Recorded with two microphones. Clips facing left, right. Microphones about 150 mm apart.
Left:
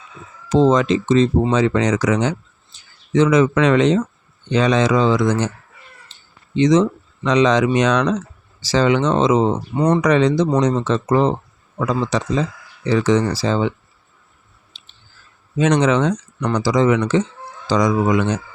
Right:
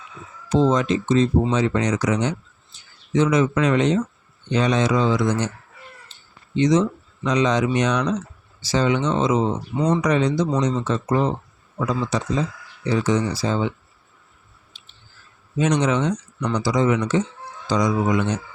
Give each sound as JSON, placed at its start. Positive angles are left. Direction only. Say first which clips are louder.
{"t": 0.4, "sound": "speech", "louder": "left 4 dB", "side_deg": 90}
{"t": 6.1, "sound": "cat", "louder": "left 1 dB", "side_deg": 90}
{"t": 6.6, "sound": "speech", "louder": "left 4 dB", "side_deg": 90}
{"t": 14.7, "sound": "clicking", "louder": "left 1 dB", "side_deg": 90}
{"t": 15.5, "sound": "speech", "louder": "left 4 dB", "side_deg": 90}